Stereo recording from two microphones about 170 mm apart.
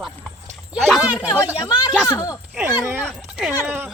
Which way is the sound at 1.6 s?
25° left (ahead or behind).